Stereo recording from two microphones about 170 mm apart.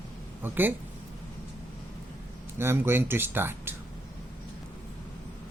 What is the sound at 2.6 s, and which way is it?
Speech, 15° right (ahead or behind).